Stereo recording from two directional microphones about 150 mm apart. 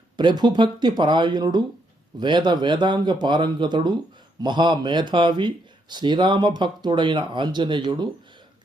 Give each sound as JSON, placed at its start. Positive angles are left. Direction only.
{"t": 0.2, "sound": "speech", "side_deg": -30}